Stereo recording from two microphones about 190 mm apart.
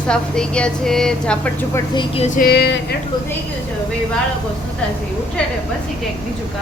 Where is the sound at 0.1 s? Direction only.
5° left (ahead or behind).